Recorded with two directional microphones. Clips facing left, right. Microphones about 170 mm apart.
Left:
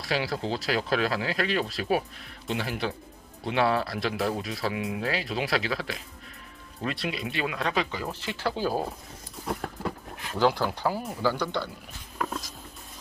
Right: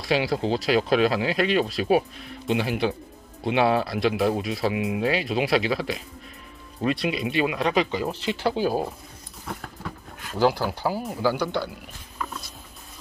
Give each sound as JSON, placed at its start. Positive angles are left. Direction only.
{"t": 0.0, "sound": "speech", "side_deg": -15}
{"t": 10.4, "sound": "speech", "side_deg": -5}